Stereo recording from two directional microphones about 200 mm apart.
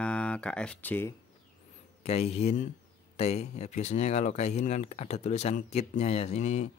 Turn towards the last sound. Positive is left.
turn(degrees=35)  # may be behind; listen again after turning